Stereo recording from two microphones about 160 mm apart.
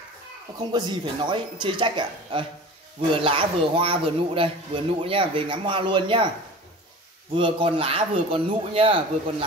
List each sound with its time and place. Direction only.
0.7 s speech: 25° right (ahead or behind)
7.3 s speech: 30° right (ahead or behind)